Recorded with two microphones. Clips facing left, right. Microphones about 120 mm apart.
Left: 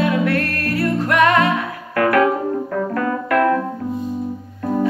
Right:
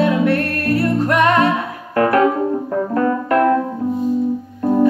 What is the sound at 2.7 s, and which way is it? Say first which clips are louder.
Piano: right 3 dB; 25° right (ahead or behind).